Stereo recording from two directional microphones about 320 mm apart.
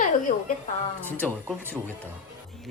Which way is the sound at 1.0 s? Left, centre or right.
Centre.